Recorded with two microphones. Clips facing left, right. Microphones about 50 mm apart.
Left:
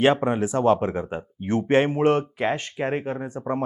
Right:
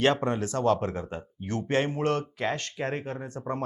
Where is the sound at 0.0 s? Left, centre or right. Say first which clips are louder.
Left 5 dB; centre.